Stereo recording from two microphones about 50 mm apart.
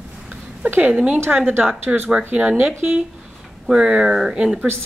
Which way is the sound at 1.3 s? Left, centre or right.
Right.